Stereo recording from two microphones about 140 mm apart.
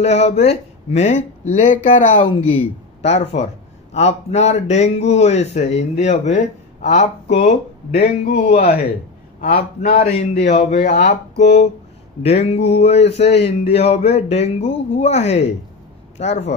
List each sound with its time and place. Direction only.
0.0 s speech: 50° left (ahead or behind)
3.0 s a man's voice: 45° left (ahead or behind)
8.5 s a man's voice: 90° left
10.4 s a man's voice: 60° left (ahead or behind)